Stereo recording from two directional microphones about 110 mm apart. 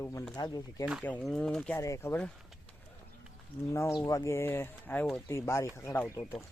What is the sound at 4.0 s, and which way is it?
Speech, 35° left (ahead or behind).